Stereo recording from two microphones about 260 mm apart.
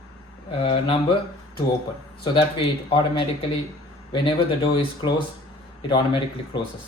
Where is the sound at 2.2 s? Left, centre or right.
Centre.